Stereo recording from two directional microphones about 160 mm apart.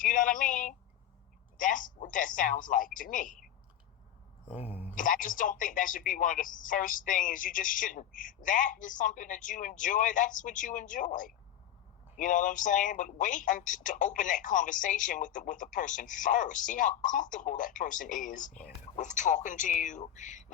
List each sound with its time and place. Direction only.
0.0 s speech: 55° left (ahead or behind)
4.4 s a sound: 40° left (ahead or behind)
4.9 s a man's voice: 55° left (ahead or behind)